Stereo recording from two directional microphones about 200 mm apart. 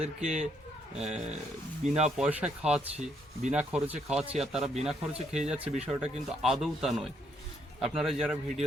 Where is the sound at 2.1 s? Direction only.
5° right (ahead or behind).